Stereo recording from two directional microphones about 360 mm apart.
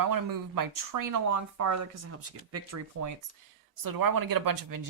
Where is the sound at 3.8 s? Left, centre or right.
Right.